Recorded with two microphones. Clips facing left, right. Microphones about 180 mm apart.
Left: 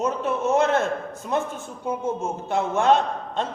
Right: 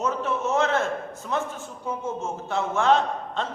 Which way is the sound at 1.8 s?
15° left (ahead or behind).